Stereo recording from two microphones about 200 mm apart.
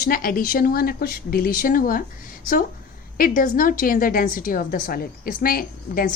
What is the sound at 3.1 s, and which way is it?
A woman's voice, 45° left (ahead or behind).